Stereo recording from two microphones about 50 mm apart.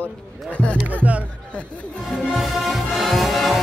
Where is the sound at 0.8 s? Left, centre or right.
Right.